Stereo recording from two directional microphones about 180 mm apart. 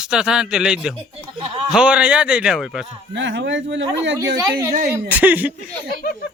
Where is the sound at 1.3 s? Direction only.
30° right (ahead or behind).